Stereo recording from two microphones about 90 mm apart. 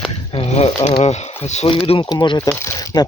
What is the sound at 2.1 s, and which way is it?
Speech, 60° left (ahead or behind).